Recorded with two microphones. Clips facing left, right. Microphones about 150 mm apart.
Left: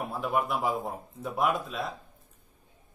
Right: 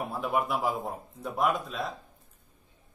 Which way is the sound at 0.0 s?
Centre (ahead or behind).